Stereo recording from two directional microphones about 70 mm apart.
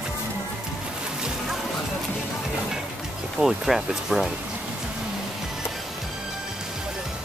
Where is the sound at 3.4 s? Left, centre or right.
Centre.